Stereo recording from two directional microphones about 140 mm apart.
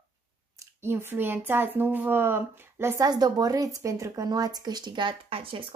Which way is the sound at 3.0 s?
30° right (ahead or behind).